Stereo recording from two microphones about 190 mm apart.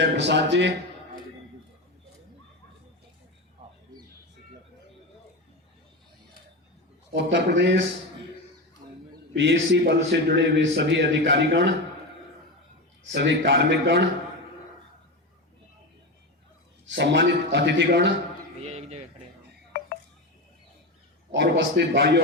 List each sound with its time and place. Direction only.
0.0 s a man's voice: 65° right (ahead or behind)
7.1 s a man's voice: 70° right (ahead or behind)
9.3 s a man's voice: 65° right (ahead or behind)
13.1 s a man's voice: 65° right (ahead or behind)
16.8 s a man's voice: 65° right (ahead or behind)
18.6 s a sound: 35° right (ahead or behind)
21.3 s a man's voice: 60° right (ahead or behind)